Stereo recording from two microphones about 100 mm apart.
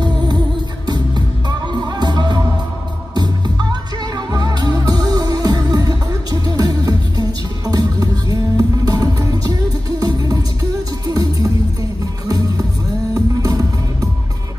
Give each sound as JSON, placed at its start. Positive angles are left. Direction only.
{"t": 0.8, "sound": "music", "side_deg": -45}